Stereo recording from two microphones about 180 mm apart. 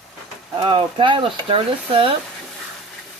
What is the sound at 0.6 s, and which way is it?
Speech, 25° right (ahead or behind).